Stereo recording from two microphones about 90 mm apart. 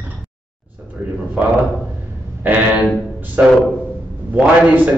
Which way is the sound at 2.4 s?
20° right (ahead or behind).